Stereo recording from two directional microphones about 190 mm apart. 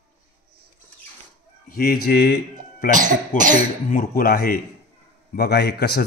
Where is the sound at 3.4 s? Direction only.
45° right (ahead or behind).